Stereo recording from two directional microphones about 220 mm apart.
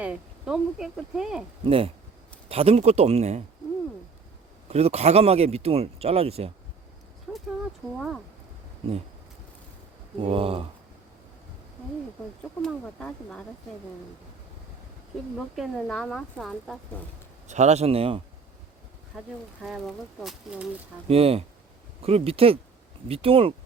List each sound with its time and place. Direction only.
0.0 s speech: 5° right (ahead or behind)
1.6 s speech: 25° right (ahead or behind)
4.7 s speech: 30° right (ahead or behind)
7.3 s a sound: centre (ahead or behind)
7.9 s speech: centre (ahead or behind)
10.2 s speech: 25° right (ahead or behind)
12.6 s speech: 5° left (ahead or behind)
15.4 s speech: centre (ahead or behind)
17.5 s speech: 30° right (ahead or behind)
19.1 s speech: 5° right (ahead or behind)
21.1 s speech: 25° right (ahead or behind)